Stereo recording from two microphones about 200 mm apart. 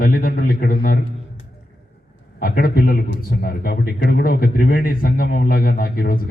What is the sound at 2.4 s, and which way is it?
A man's voice, 50° left (ahead or behind).